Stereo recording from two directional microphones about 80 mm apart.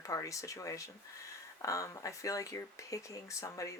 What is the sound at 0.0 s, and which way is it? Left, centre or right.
Speech, left.